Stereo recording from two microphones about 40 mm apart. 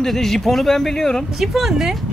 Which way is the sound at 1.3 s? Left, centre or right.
Centre.